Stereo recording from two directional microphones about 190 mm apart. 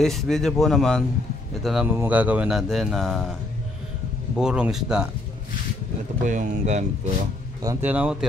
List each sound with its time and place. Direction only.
0.0 s speech: centre (ahead or behind)
4.4 s speech: 5° right (ahead or behind)
6.2 s speech: 40° right (ahead or behind)
7.6 s speech: 10° right (ahead or behind)